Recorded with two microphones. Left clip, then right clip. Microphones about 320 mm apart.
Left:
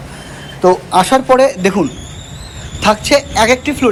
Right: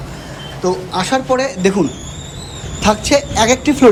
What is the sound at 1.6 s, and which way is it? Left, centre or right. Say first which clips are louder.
A woman's voice: left 1 dB; centre.